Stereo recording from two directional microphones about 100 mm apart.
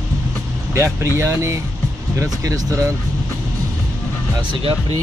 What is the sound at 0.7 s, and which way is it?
Speech, 30° right (ahead or behind).